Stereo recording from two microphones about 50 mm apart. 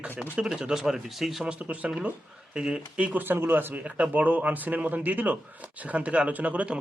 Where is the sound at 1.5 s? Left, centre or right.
Right.